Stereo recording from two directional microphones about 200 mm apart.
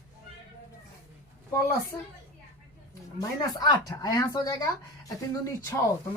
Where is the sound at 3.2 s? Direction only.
20° left (ahead or behind).